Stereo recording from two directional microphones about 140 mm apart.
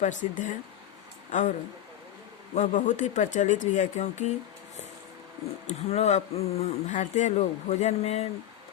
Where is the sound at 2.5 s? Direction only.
60° left (ahead or behind).